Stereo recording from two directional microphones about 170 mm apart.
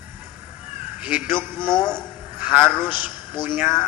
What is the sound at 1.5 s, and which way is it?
A man's voice, 25° left (ahead or behind).